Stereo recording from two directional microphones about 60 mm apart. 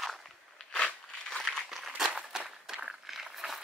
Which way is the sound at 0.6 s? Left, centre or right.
Centre.